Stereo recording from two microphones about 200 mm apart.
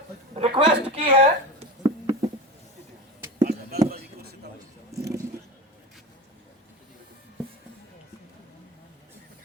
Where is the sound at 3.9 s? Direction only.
50° right (ahead or behind).